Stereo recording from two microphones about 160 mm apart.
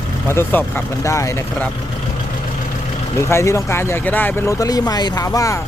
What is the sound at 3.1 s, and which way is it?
Speech, 20° left (ahead or behind).